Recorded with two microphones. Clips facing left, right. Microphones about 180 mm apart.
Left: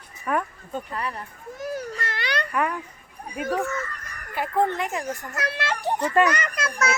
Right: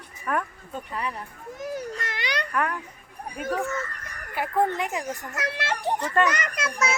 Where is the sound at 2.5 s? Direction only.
5° left (ahead or behind).